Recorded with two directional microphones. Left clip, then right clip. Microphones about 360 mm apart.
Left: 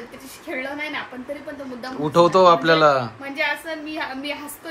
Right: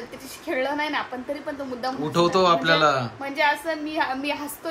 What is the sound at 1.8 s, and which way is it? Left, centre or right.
Speech, centre.